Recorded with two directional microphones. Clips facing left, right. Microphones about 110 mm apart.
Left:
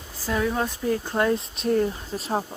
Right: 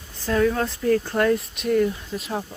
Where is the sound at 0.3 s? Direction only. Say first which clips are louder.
Right 4 dB; 10° left (ahead or behind).